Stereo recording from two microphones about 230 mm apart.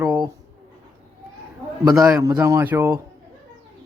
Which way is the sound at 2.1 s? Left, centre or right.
Centre.